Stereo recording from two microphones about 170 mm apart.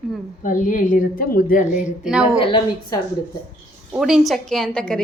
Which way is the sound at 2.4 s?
30° left (ahead or behind).